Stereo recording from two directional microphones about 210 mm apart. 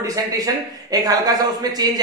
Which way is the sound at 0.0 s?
15° right (ahead or behind).